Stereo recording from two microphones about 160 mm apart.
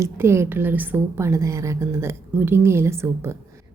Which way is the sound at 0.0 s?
15° right (ahead or behind).